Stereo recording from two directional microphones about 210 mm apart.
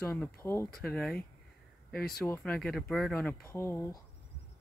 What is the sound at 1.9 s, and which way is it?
Speech, 45° left (ahead or behind).